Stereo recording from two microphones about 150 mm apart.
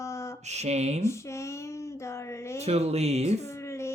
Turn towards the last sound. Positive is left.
turn(degrees=20)  # may be behind; listen again after turning